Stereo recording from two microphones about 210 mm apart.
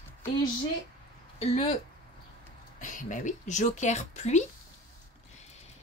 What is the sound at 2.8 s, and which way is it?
A woman's voice, 40° left (ahead or behind).